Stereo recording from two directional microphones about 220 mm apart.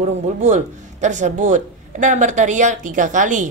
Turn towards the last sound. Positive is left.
turn(degrees=-35)  # may be behind; listen again after turning